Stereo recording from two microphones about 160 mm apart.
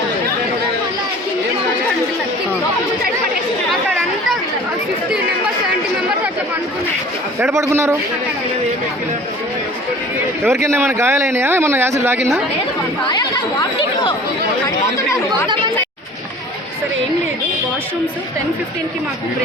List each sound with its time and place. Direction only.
7.5 s speech: 15° right (ahead or behind)
10.4 s speech: 15° right (ahead or behind)
13.1 s speech: 30° left (ahead or behind)